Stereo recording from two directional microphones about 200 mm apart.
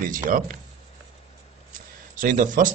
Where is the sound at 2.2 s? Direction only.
40° right (ahead or behind).